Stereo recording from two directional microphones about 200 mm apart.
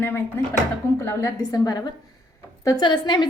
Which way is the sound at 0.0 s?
10° left (ahead or behind).